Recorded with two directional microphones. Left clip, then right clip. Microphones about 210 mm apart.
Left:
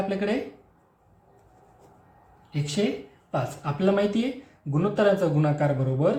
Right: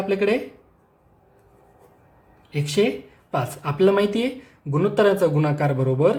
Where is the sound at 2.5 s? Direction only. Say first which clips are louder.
Right 6 dB; 40° right (ahead or behind).